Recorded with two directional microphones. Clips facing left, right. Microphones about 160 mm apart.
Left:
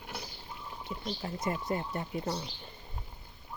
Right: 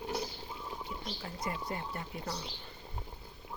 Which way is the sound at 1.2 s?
30° left (ahead or behind).